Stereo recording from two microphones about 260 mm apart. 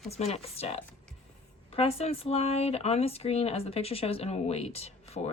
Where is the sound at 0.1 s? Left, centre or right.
Left.